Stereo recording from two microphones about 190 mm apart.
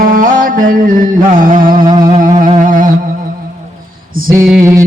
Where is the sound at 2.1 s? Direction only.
40° right (ahead or behind).